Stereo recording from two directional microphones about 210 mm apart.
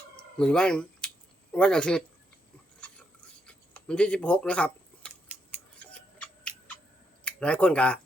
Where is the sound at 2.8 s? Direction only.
5° left (ahead or behind).